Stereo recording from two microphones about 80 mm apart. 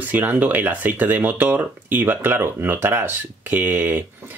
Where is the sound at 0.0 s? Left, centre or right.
Right.